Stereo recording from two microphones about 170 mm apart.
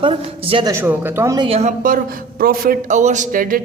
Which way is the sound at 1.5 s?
40° right (ahead or behind).